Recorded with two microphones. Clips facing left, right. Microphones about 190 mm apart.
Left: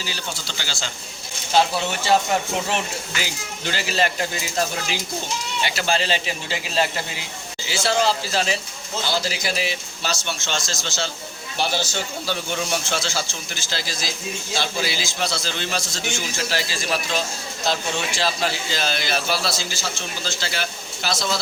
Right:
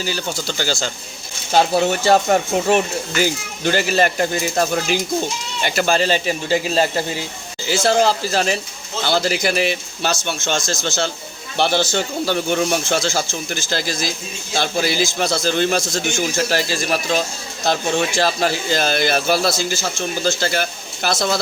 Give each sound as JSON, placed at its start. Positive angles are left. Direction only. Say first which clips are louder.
{"t": 0.0, "sound": "a man's voice", "louder": "right 8 dB", "side_deg": -50}
{"t": 11.5, "sound": "speech", "louder": "right 7 dB", "side_deg": -60}